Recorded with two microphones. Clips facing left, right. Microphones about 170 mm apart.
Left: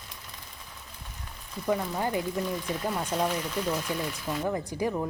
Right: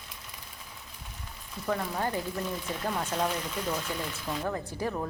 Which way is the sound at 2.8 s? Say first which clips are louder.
Left 1 dB; 10° left (ahead or behind).